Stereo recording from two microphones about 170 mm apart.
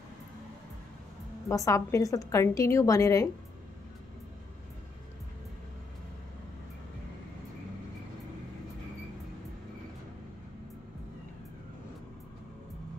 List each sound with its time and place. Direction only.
1.5 s a woman's voice: 20° left (ahead or behind)